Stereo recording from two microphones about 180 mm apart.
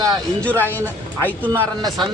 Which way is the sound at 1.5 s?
20° right (ahead or behind).